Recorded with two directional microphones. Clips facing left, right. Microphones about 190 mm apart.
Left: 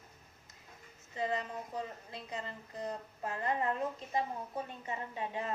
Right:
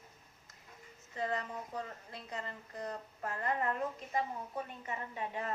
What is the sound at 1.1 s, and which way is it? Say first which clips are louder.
A woman's voice: left 1 dB; 20° left (ahead or behind).